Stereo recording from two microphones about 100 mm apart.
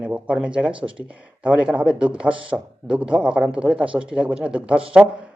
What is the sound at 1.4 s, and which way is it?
Speech, 10° right (ahead or behind).